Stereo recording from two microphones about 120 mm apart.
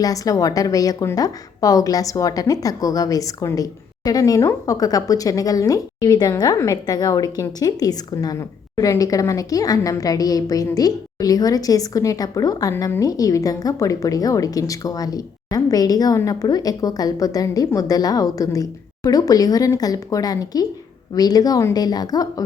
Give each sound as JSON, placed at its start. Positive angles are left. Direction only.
{"t": 0.0, "sound": "a woman's voice", "side_deg": 30}